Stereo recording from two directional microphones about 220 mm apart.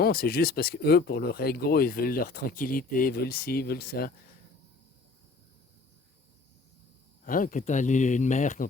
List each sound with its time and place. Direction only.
0.0 s speech: 45° left (ahead or behind)
7.3 s speech: 40° left (ahead or behind)